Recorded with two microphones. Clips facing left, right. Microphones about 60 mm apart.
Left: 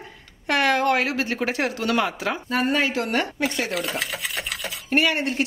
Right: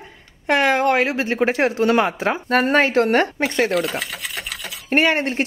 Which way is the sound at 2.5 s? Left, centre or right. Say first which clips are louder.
Right 6 dB; right.